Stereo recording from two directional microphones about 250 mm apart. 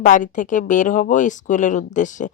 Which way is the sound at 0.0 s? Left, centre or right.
Left.